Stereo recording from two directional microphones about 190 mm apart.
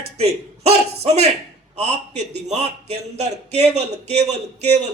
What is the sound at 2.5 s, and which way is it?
A man's voice, 35° right (ahead or behind).